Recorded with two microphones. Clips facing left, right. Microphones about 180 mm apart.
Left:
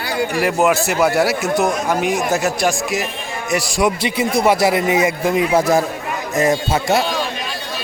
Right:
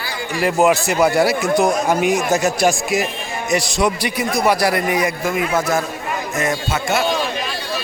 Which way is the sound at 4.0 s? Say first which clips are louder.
Left 2 dB; 25° left (ahead or behind).